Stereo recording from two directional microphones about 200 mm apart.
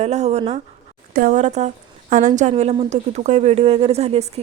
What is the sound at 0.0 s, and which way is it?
A woman's voice, 35° right (ahead or behind).